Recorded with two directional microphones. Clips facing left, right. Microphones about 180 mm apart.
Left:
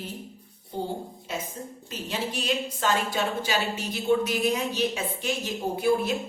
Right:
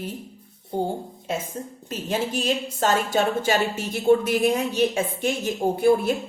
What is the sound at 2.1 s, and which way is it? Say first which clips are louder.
A woman's voice: right 5 dB; 45° right (ahead or behind).